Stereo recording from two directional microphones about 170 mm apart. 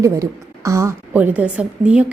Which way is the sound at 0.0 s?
20° right (ahead or behind).